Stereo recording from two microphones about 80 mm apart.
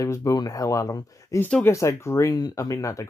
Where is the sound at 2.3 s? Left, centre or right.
Left.